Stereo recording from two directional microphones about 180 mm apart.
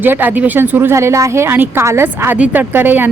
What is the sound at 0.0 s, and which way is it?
Speech, 10° right (ahead or behind).